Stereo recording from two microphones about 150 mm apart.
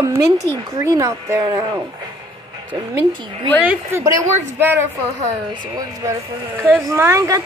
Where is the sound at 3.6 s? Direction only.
15° right (ahead or behind).